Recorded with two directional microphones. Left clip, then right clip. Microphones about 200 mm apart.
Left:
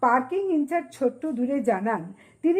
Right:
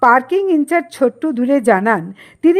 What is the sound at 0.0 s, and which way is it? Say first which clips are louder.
A woman's voice: right 10 dB; 35° right (ahead or behind).